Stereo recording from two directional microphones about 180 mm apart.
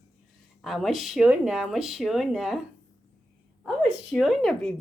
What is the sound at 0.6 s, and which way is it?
Speech, centre (ahead or behind).